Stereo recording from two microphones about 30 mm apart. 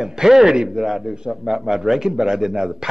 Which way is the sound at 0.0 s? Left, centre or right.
Centre.